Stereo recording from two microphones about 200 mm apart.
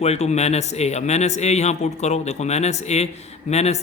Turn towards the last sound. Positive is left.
turn(degrees=35)  # may be behind; listen again after turning